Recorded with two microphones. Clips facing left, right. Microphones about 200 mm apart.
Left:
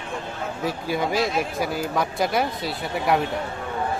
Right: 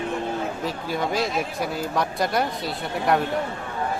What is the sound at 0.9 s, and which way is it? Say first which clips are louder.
Speech: left 2 dB; 5° left (ahead or behind).